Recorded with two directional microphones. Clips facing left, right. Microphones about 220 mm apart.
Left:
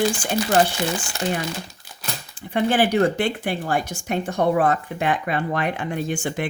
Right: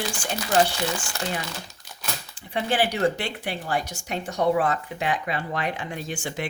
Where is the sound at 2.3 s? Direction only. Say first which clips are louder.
Left 5 dB; 50° left (ahead or behind).